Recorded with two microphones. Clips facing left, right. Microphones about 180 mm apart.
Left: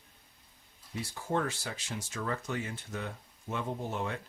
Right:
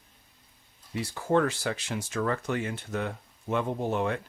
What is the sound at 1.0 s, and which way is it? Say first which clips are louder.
Speech: right 7 dB; 80° right.